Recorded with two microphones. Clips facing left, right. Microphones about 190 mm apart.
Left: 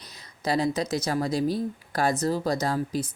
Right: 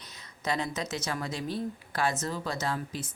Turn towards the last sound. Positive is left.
turn(degrees=40)  # may be behind; listen again after turning